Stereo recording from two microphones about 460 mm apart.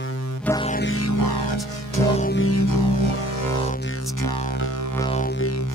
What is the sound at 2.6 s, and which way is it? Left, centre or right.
Music, left.